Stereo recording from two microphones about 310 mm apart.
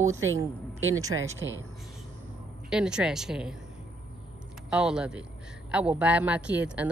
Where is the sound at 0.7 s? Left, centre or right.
Right.